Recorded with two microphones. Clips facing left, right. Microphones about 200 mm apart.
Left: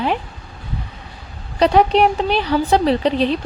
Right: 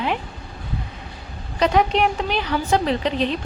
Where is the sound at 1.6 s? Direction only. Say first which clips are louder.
Left 5 dB; 35° left (ahead or behind).